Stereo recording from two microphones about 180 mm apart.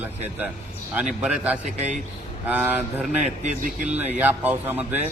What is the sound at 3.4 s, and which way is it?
Speech, 40° right (ahead or behind).